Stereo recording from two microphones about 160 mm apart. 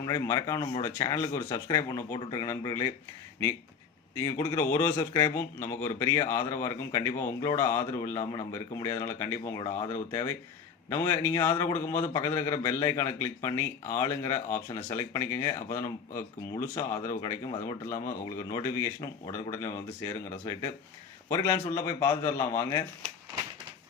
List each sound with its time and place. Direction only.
0.0 s speech: 20° left (ahead or behind)
4.3 s a man's voice: 15° left (ahead or behind)